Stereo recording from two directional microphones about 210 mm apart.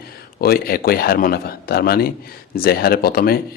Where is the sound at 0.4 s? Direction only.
45° left (ahead or behind).